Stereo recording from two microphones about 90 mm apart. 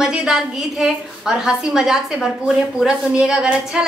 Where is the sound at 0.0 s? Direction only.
5° right (ahead or behind).